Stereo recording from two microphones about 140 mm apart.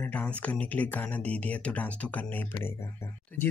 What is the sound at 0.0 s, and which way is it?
Speech, 10° left (ahead or behind).